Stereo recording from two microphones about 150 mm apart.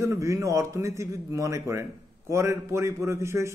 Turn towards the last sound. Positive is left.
turn(degrees=-20)  # may be behind; listen again after turning